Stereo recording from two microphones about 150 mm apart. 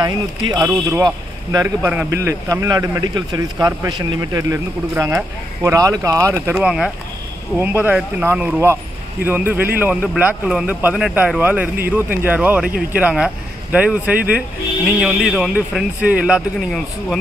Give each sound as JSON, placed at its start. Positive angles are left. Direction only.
{"t": 0.0, "sound": "a man's voice", "side_deg": -25}